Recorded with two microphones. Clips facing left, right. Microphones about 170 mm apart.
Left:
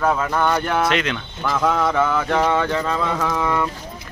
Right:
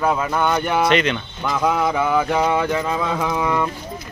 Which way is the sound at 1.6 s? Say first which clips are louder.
Even; 5° right (ahead or behind).